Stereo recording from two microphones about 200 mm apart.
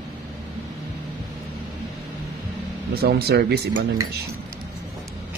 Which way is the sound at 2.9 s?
50° right (ahead or behind).